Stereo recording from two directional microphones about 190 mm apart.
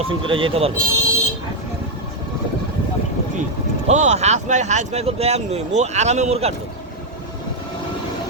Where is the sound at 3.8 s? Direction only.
35° right (ahead or behind).